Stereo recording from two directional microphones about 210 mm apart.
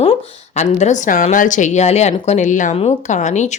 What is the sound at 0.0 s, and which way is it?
Speech, 30° left (ahead or behind).